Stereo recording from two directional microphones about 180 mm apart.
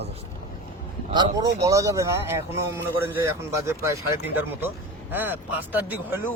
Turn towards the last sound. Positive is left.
turn(degrees=-10)  # may be behind; listen again after turning